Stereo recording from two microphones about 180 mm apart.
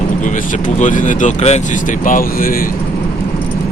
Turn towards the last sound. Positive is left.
turn(degrees=50)  # may be behind; listen again after turning